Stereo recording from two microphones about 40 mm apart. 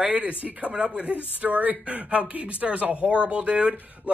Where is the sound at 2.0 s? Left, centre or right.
Right.